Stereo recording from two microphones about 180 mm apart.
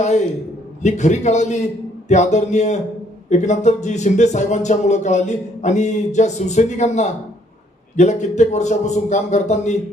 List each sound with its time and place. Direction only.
0.0 s speech: 40° left (ahead or behind)